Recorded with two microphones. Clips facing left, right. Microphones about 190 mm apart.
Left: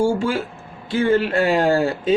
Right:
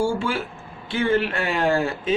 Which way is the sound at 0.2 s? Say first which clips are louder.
Left 4 dB; 40° left (ahead or behind).